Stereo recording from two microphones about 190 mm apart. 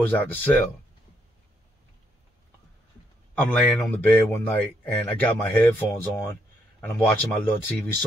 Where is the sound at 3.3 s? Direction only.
10° left (ahead or behind).